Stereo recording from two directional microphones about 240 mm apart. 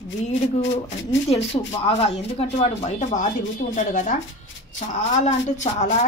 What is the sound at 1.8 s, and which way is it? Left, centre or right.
Speech, left.